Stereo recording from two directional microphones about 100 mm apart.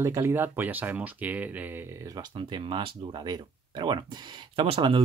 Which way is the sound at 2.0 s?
40° right (ahead or behind).